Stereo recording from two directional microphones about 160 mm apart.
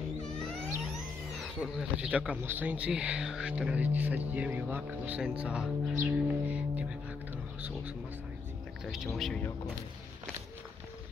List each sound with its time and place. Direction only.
0.9 s speech: centre (ahead or behind)
8.8 s speech: centre (ahead or behind)